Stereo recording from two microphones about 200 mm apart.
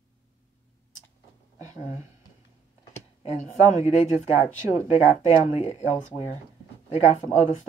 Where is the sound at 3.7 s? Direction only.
35° left (ahead or behind).